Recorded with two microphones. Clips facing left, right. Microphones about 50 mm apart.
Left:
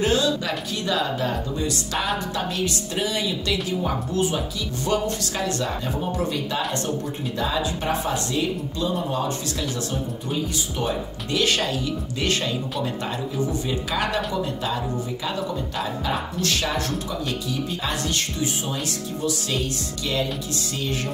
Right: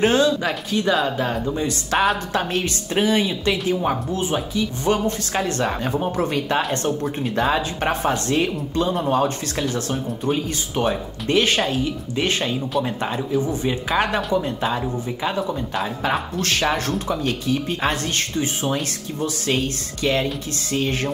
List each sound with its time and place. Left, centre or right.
0.0 s speech: right
2.3 s speech: right
5.6 s speech: right
16.0 s speech: right